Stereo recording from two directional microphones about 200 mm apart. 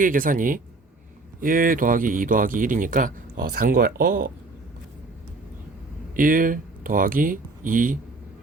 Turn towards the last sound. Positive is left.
turn(degrees=-45)  # may be behind; listen again after turning